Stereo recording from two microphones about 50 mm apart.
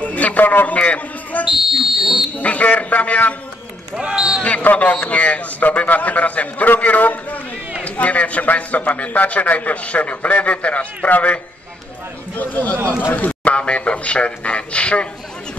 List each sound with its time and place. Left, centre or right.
0.0 s a sound: left
1.6 s speech: centre
2.3 s a man's voice: left
4.0 s a man's voice: centre
4.4 s a man's voice: left
13.4 s a man's voice: left